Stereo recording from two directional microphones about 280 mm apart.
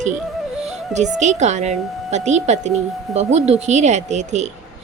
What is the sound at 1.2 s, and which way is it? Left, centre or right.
A woman's voice, right.